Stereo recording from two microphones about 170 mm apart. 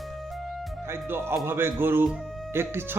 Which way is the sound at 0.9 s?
15° right (ahead or behind).